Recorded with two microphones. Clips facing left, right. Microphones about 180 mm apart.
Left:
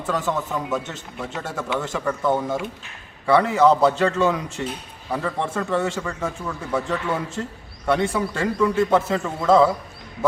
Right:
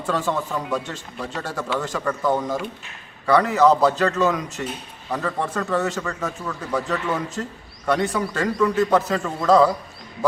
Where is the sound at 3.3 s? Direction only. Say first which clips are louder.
Even; 25° left (ahead or behind).